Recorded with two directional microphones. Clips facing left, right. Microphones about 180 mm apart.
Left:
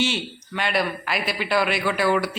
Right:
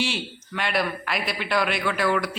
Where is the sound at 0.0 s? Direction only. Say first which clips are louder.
Left 3 dB; centre (ahead or behind).